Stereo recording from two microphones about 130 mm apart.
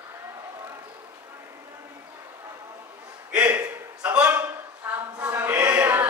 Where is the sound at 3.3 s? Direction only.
10° right (ahead or behind).